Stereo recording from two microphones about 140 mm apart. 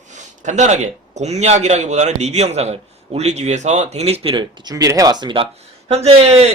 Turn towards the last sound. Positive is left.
turn(degrees=-50)  # may be behind; listen again after turning